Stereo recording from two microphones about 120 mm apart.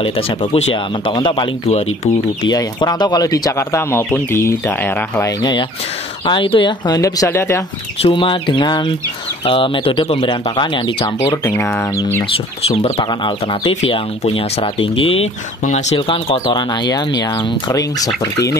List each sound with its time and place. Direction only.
0.0 s speech: 50° left (ahead or behind)
1.1 s speech: 40° left (ahead or behind); by 5.2 s 15° left (ahead or behind)
5.4 s speech: 40° left (ahead or behind)
6.9 s speech: 30° left (ahead or behind)
8.0 s speech: 45° left (ahead or behind)
11.5 s speech: 20° left (ahead or behind)
12.6 s speech: 55° left (ahead or behind)
12.9 s speech: 40° left (ahead or behind)
15.6 s speech: 75° left (ahead or behind)
16.0 s speech: 45° left (ahead or behind); by 18.6 s 30° left (ahead or behind)